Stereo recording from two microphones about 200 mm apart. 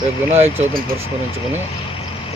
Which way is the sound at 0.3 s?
30° right (ahead or behind).